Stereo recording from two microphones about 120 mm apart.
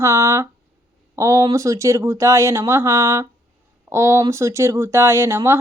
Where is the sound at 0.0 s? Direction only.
25° right (ahead or behind).